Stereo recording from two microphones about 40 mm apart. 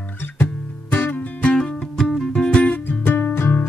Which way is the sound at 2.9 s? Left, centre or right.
Left.